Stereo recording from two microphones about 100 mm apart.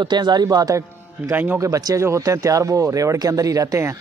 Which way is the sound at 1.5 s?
35° right (ahead or behind).